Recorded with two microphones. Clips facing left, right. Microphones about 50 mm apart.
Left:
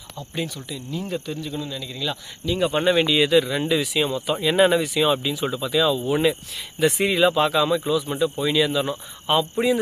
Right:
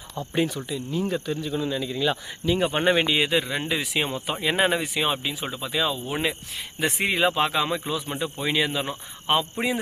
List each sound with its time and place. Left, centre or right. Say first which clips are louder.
0.2 s speech: right 4 dB; right
0.9 s speech: right 2 dB; centre; by 9.8 s right